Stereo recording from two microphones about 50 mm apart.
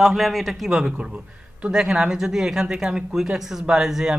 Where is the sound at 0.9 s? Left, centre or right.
Right.